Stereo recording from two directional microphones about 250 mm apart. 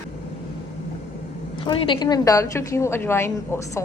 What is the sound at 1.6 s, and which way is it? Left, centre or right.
Speech, centre.